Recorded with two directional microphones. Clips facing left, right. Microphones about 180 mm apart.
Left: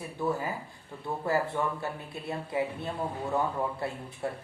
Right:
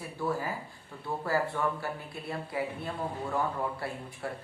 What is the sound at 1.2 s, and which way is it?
Speech, 20° left (ahead or behind).